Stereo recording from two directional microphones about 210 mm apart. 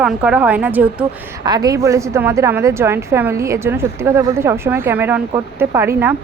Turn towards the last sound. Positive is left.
turn(degrees=-10)  # may be behind; listen again after turning